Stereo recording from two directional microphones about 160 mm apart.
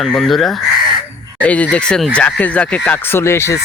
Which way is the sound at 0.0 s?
Centre (ahead or behind).